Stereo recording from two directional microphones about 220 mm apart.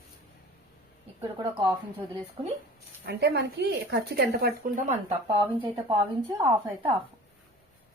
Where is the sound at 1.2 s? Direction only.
20° right (ahead or behind).